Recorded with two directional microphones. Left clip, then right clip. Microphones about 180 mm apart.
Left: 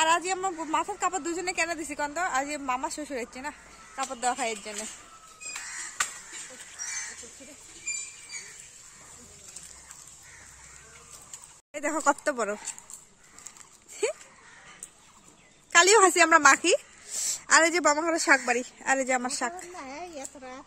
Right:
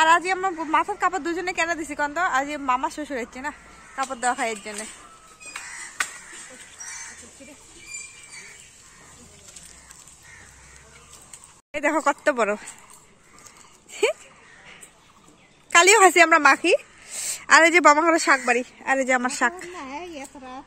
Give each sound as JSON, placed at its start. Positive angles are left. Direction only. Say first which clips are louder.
{"t": 0.0, "sound": "speech", "louder": "right 7 dB", "side_deg": 0}
{"t": 11.7, "sound": "speech", "louder": "right 4 dB", "side_deg": 0}
{"t": 15.7, "sound": "speech", "louder": "right 5 dB", "side_deg": -10}
{"t": 17.4, "sound": "speech", "louder": "right 7 dB", "side_deg": 0}
{"t": 18.6, "sound": "speech", "louder": "right 4 dB", "side_deg": 15}
{"t": 19.0, "sound": "speech", "louder": "right 7 dB", "side_deg": 0}
{"t": 19.7, "sound": "a sound", "louder": "right 5 dB", "side_deg": -65}